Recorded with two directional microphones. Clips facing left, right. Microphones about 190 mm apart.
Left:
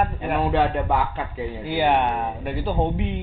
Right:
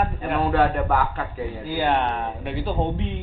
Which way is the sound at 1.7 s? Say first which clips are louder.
Left 2 dB; 15° left (ahead or behind).